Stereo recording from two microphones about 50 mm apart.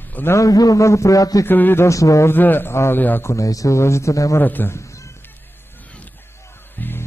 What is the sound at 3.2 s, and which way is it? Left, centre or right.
A man's voice, left.